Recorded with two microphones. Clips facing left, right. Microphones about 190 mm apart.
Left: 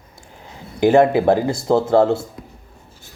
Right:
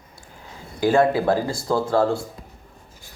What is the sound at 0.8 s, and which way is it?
Speech, 20° left (ahead or behind).